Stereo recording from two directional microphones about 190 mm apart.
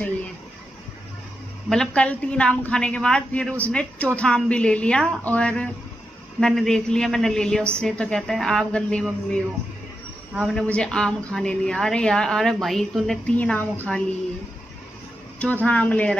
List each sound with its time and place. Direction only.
1.7 s a woman's voice: 5° left (ahead or behind)
15.3 s speech: 5° left (ahead or behind)